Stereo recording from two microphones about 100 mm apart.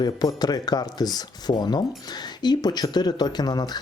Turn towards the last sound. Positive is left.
turn(degrees=40)  # may be behind; listen again after turning